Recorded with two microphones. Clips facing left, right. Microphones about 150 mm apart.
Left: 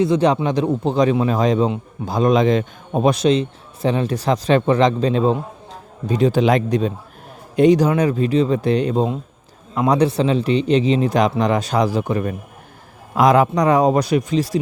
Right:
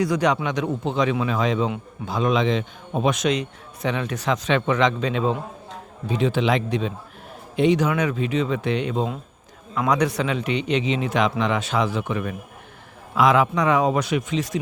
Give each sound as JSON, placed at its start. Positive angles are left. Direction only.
{"t": 0.0, "sound": "a man's voice", "side_deg": 25}